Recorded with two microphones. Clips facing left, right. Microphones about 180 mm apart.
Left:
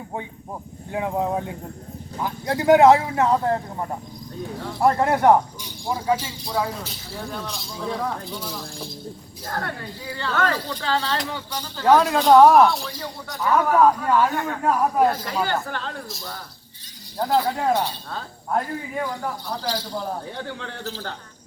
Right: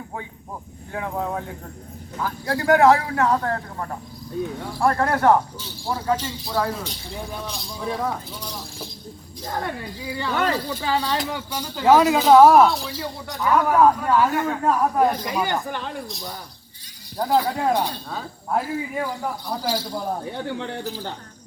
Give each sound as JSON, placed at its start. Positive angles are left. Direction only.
{"t": 0.9, "sound": "speech", "side_deg": 20}
{"t": 6.4, "sound": "speech", "side_deg": 0}
{"t": 9.5, "sound": "speech", "side_deg": -10}
{"t": 15.0, "sound": "speech", "side_deg": -15}
{"t": 17.2, "sound": "speech", "side_deg": -10}